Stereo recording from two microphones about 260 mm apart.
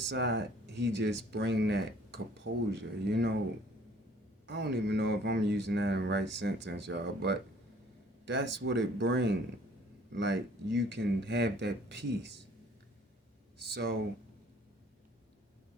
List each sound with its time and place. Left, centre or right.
0.1 s speech: right
4.4 s speech: right
13.6 s speech: right